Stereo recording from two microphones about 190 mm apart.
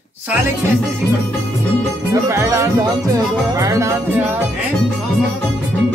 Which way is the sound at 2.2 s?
15° right (ahead or behind).